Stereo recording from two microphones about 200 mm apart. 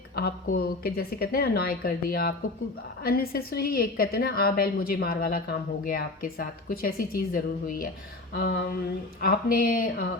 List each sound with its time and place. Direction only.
0.2 s a woman's voice: 50° left (ahead or behind)